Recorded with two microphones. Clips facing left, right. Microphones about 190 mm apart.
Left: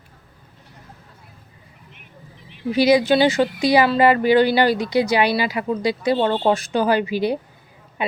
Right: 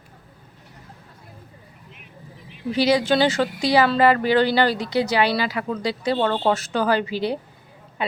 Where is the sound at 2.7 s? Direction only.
10° left (ahead or behind).